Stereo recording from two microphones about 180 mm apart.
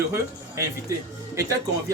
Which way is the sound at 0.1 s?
15° right (ahead or behind).